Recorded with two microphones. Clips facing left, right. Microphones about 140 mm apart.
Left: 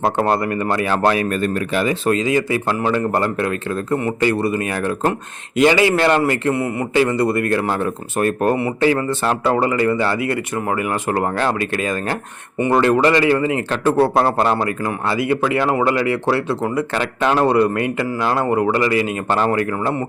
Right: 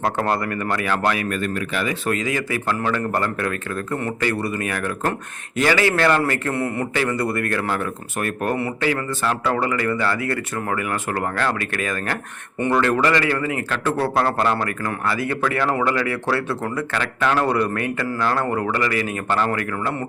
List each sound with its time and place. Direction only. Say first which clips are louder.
0.0 s speech: left 4 dB; 25° left (ahead or behind)